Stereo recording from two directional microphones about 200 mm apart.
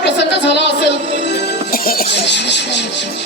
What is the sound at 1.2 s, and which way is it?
Speech, 60° left (ahead or behind).